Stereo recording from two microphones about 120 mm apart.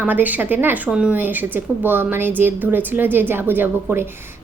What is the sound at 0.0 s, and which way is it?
A woman's voice, 15° right (ahead or behind).